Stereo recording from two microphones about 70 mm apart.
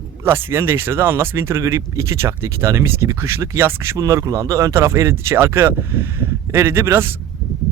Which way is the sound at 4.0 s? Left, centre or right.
Right.